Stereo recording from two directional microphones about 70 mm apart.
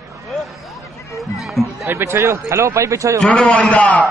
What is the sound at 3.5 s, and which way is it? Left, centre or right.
Speech, centre.